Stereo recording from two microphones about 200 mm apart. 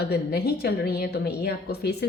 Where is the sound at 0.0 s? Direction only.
50° left (ahead or behind).